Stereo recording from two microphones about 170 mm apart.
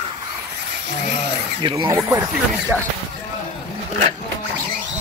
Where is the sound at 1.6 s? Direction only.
25° right (ahead or behind).